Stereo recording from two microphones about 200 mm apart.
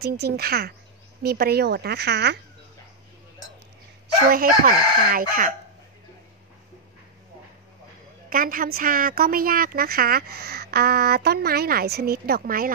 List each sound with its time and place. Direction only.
0.0 s a woman's voice: 50° right (ahead or behind)
4.3 s a woman's voice: 45° right (ahead or behind)
8.3 s a woman's voice: 45° right (ahead or behind)